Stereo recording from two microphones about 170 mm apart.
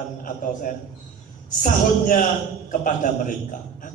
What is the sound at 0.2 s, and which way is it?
Speech, 50° left (ahead or behind).